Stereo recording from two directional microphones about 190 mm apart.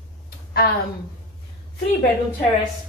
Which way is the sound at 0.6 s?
55° left (ahead or behind).